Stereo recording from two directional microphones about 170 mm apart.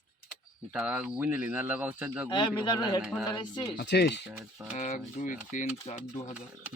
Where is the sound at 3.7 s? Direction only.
80° left.